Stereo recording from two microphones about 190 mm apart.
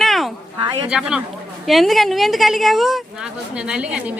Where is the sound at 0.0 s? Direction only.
Centre (ahead or behind).